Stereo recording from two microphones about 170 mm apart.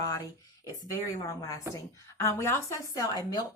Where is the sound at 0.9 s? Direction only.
20° left (ahead or behind).